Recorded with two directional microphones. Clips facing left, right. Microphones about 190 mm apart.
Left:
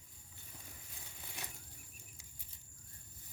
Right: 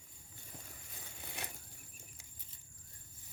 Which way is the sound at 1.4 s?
60° right (ahead or behind).